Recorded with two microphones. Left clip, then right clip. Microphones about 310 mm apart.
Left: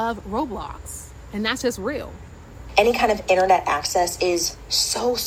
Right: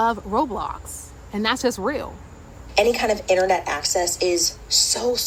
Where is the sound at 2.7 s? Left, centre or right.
Centre.